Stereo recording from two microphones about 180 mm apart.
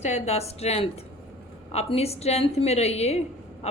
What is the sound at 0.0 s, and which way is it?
A woman's voice, 35° left (ahead or behind).